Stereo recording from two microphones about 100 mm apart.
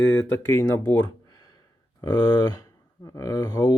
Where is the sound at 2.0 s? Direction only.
40° left (ahead or behind).